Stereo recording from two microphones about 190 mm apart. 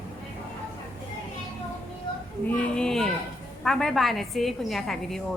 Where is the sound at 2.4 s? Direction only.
5° left (ahead or behind).